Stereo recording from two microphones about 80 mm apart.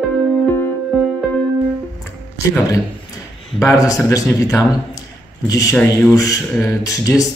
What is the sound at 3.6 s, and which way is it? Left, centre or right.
A man's voice, left.